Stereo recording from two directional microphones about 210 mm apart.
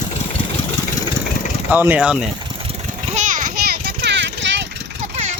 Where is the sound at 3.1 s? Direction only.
40° right (ahead or behind); by 4.5 s 55° right (ahead or behind).